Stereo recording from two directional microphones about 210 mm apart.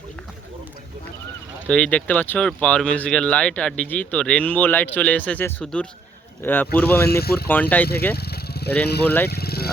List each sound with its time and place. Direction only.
1.6 s speech: 5° left (ahead or behind)
7.1 s speech: 50° left (ahead or behind)
7.4 s speech: 10° left (ahead or behind)
8.1 s vehicle: 50° left (ahead or behind)
9.2 s speech: 50° left (ahead or behind)